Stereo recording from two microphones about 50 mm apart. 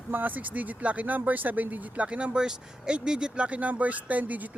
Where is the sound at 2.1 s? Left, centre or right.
Right.